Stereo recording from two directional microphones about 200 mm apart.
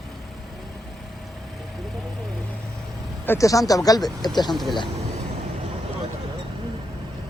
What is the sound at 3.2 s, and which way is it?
Speech, 15° left (ahead or behind).